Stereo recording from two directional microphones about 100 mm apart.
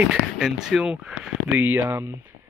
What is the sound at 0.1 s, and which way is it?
Speech, 5° right (ahead or behind).